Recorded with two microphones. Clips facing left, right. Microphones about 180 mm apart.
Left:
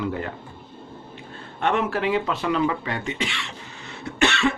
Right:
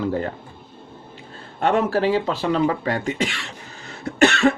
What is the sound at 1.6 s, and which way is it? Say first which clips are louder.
Speech: right 4 dB; 35° right (ahead or behind).